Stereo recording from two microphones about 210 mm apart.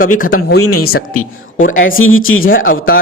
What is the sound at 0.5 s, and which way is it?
Speech, 90° left.